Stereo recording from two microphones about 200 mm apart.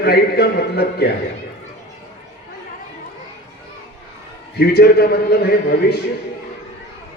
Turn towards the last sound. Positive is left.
turn(degrees=55)  # may be behind; listen again after turning